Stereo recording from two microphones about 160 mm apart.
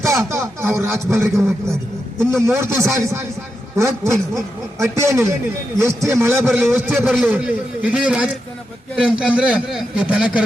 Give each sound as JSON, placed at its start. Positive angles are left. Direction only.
{"t": 0.2, "sound": "a sound", "side_deg": -15}
{"t": 0.8, "sound": "a man's voice", "side_deg": -20}
{"t": 7.3, "sound": "a man's voice", "side_deg": -10}